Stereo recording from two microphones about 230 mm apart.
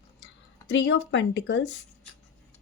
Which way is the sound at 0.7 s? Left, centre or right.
Left.